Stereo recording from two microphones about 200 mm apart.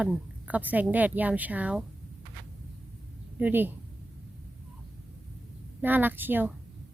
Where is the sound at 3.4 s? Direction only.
10° right (ahead or behind).